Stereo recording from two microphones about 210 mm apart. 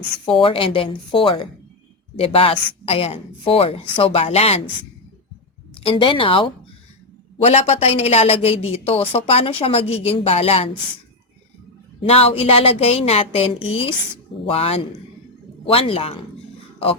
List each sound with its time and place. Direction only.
0.4 s a woman's voice: 25° left (ahead or behind)
5.8 s a woman's voice: 25° left (ahead or behind)
12.0 s a woman's voice: 30° left (ahead or behind)